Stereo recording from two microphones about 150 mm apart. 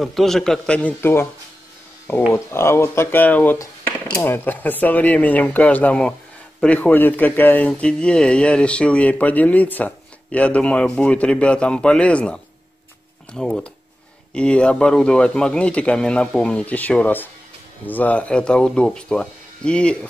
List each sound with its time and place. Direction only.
0.0 s a man's voice: centre (ahead or behind)
2.3 s a man's voice: 15° left (ahead or behind)